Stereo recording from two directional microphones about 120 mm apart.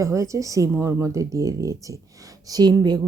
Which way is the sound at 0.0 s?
25° right (ahead or behind).